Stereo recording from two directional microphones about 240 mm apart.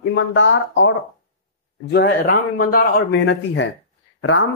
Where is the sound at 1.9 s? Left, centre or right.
Left.